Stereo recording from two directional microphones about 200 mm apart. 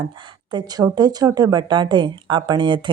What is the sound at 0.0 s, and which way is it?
Speech, 20° right (ahead or behind).